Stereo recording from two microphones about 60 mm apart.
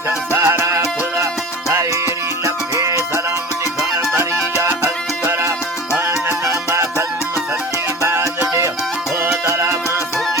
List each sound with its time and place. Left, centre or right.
0.3 s music: right
4.1 s music: right
8.4 s music: right